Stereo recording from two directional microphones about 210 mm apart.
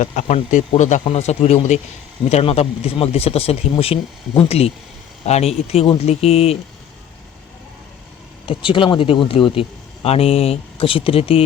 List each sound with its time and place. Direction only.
0.0 s speech: 35° left (ahead or behind)
8.4 s speech: 25° left (ahead or behind)